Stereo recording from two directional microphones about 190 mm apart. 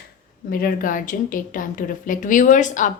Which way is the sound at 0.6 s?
45° left (ahead or behind).